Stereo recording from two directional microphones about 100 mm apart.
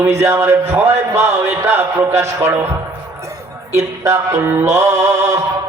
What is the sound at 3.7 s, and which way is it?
Music, 30° right (ahead or behind).